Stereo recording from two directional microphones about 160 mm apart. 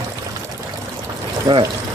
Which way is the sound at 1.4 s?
25° right (ahead or behind).